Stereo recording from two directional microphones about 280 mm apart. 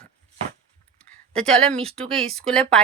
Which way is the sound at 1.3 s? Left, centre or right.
Centre.